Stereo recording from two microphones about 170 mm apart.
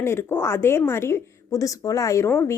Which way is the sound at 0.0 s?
15° left (ahead or behind).